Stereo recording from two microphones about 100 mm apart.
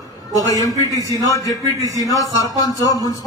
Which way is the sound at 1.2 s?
35° left (ahead or behind).